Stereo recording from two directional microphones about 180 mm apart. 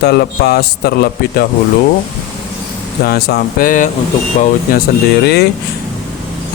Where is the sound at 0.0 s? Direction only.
60° left (ahead or behind).